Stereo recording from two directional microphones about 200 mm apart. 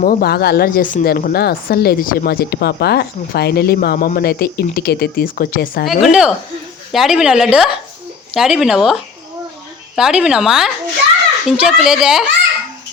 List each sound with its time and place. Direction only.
0.0 s speech: 45° left (ahead or behind)
5.8 s a woman's voice: centre (ahead or behind)